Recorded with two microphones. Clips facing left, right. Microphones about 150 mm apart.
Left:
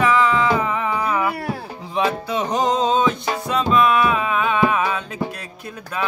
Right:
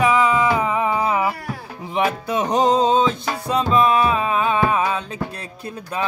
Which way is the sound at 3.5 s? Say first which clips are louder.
Even; 30° right (ahead or behind).